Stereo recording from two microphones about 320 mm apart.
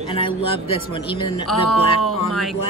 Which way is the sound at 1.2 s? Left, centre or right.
Left.